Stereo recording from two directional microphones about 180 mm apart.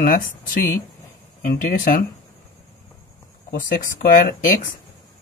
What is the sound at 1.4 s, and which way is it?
Speech, 50° left (ahead or behind).